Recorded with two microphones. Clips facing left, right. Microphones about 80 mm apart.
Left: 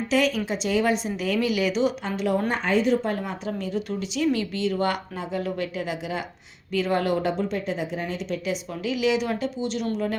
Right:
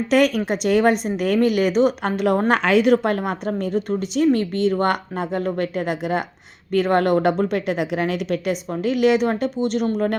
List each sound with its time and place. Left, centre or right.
0.1 s a woman's voice: right
2.5 s a woman's voice: right
8.7 s a woman's voice: right